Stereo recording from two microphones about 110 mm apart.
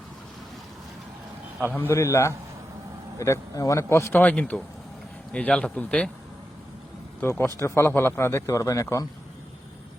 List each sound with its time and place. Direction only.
1.7 s speech: 20° left (ahead or behind)
7.2 s speech: 20° left (ahead or behind)